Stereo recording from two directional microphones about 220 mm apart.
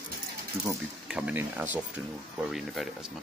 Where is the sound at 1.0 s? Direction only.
5° right (ahead or behind).